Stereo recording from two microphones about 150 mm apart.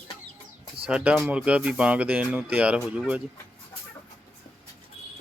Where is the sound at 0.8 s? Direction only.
5° right (ahead or behind).